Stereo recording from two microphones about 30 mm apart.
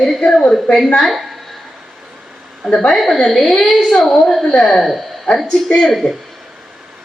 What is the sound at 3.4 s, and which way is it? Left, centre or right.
Speech, centre.